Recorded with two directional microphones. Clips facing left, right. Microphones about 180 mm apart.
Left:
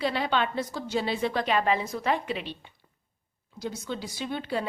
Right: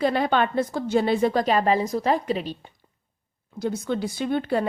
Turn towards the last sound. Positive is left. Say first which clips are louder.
# right 7 dB
turn(degrees=-50)  # may be behind; listen again after turning